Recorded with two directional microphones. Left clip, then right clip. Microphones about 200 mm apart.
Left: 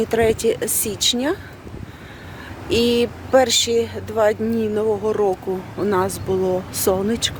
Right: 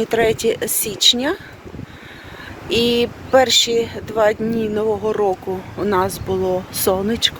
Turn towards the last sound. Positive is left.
turn(degrees=10)  # may be behind; listen again after turning